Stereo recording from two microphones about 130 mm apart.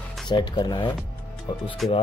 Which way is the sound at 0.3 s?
35° left (ahead or behind).